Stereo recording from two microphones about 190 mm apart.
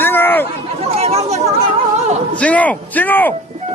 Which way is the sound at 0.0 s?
10° left (ahead or behind).